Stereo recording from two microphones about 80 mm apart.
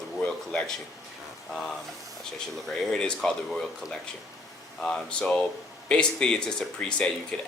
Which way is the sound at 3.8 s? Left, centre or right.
Left.